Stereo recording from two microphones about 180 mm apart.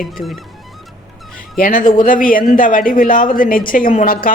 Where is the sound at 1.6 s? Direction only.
50° left (ahead or behind).